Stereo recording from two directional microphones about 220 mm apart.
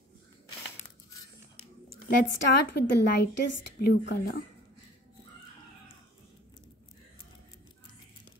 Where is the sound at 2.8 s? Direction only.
50° left (ahead or behind).